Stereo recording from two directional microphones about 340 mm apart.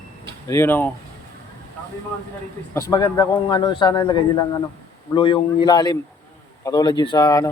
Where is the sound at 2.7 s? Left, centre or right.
Centre.